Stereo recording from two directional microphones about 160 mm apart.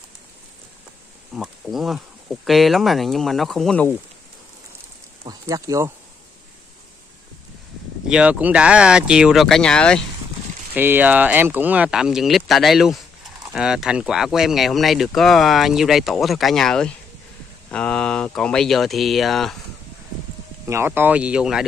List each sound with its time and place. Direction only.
1.3 s speech: centre (ahead or behind)
5.2 s speech: 20° right (ahead or behind)
8.1 s speech: 5° right (ahead or behind)
10.7 s speech: 10° right (ahead or behind)
20.6 s speech: 15° right (ahead or behind)